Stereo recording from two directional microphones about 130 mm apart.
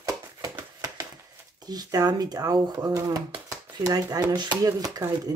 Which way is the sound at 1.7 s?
30° right (ahead or behind).